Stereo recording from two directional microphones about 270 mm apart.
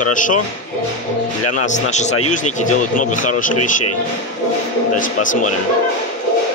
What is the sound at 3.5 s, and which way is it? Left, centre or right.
Speech, left.